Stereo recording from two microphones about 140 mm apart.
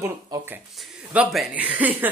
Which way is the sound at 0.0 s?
20° right (ahead or behind).